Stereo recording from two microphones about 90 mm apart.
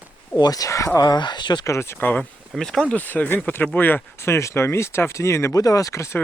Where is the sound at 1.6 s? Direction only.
30° left (ahead or behind).